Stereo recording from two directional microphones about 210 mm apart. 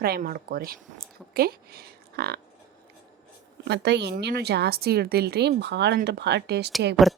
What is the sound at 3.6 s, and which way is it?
Speech, 55° right (ahead or behind).